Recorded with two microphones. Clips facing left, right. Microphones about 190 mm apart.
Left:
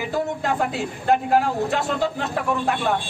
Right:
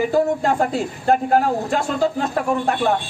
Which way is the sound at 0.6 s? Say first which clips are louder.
Right 4 dB; 45° right (ahead or behind).